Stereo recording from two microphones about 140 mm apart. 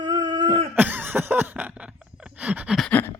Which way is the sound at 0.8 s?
15° right (ahead or behind).